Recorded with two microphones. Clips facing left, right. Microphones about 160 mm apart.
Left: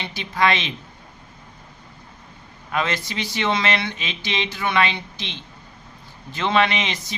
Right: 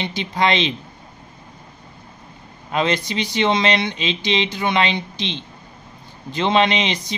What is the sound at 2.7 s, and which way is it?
Speech, 20° right (ahead or behind).